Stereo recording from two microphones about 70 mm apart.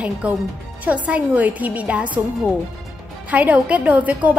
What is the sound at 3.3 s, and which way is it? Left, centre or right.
A woman's voice, right.